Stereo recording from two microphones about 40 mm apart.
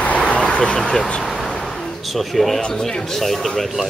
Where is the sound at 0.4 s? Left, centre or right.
Centre.